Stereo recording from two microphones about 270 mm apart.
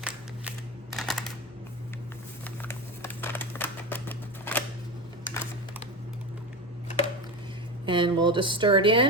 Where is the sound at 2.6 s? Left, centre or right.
Centre.